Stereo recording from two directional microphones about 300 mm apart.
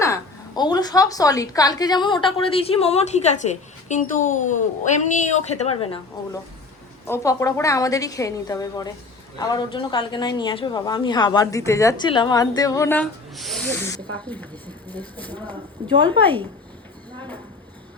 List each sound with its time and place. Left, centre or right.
0.0 s a woman's voice: centre
15.9 s speech: centre